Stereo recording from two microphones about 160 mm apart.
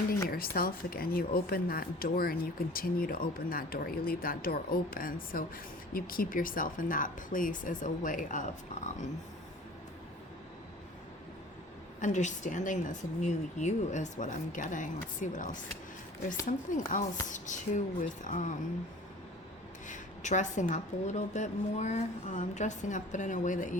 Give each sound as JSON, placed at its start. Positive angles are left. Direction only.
{"t": 0.3, "sound": "speech", "side_deg": 65}
{"t": 11.9, "sound": "a woman's voice", "side_deg": 50}
{"t": 19.9, "sound": "a woman's voice", "side_deg": 50}